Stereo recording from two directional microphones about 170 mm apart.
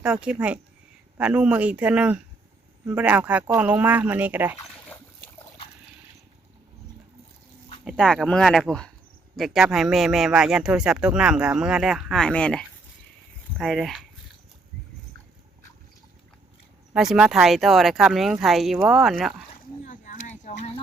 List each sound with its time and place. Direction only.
0.0 s speech: 5° right (ahead or behind)
7.9 s a man's voice: 5° left (ahead or behind)
16.9 s a man's voice: centre (ahead or behind)
19.8 s a sound: 50° left (ahead or behind)